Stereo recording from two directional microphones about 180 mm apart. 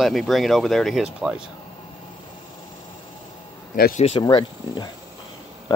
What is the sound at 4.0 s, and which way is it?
Speech, 30° left (ahead or behind).